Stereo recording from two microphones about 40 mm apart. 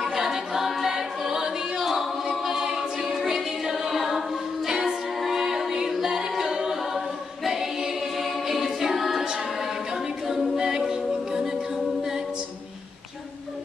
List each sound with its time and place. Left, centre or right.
0.1 s choir: centre
4.6 s music: centre
5.2 s a capella: centre
7.4 s choir: centre
8.5 s a capella: centre
9.2 s a capella: centre